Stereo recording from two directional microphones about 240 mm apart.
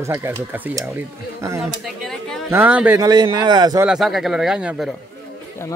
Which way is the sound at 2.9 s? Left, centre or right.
Centre.